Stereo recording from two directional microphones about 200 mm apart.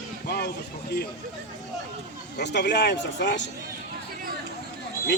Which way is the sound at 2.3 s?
55° left (ahead or behind).